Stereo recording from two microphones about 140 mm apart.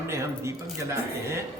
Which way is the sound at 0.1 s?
20° right (ahead or behind).